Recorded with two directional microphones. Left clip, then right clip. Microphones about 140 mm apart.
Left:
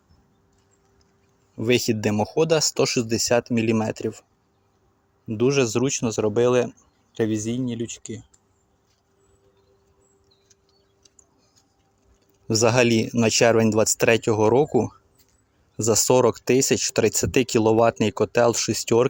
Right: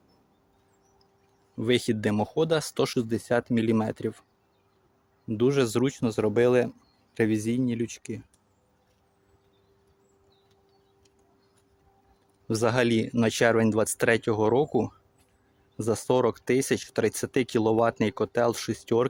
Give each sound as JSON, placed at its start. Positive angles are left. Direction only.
{"t": 1.5, "sound": "speech", "side_deg": 15}
{"t": 5.3, "sound": "speech", "side_deg": 0}
{"t": 12.5, "sound": "speech", "side_deg": 20}